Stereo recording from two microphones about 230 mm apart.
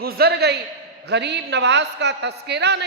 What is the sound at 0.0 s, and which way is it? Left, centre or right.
A man's voice, right.